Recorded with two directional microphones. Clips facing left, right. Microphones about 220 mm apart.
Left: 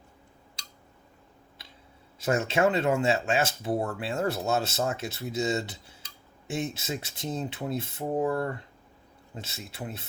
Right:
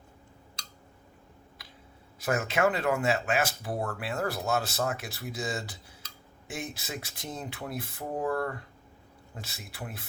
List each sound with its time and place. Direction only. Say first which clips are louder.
2.1 s speech: left 3 dB; 25° left (ahead or behind)